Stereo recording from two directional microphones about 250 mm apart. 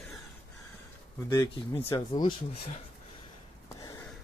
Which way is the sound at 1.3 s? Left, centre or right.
Centre.